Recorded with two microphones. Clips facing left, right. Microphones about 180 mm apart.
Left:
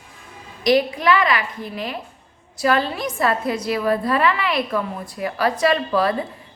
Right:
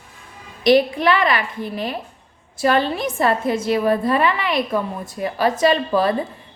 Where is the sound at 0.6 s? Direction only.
30° right (ahead or behind).